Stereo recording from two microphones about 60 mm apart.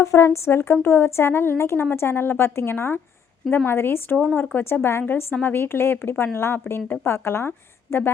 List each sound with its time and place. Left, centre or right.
0.0 s a woman's voice: left